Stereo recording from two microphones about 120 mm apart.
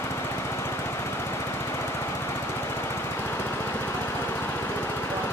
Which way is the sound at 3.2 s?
20° left (ahead or behind).